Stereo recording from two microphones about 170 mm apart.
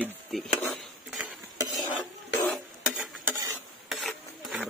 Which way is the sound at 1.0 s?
5° right (ahead or behind).